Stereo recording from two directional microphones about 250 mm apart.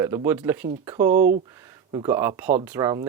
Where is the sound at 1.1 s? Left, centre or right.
Right.